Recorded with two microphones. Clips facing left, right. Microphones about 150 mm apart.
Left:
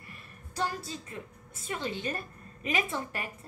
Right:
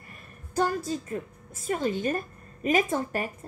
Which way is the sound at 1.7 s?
45° right (ahead or behind).